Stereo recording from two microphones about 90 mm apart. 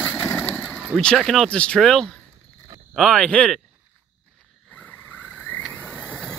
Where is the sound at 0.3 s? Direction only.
20° left (ahead or behind).